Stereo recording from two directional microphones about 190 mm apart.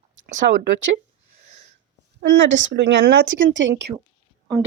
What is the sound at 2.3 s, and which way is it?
Speech, 80° right.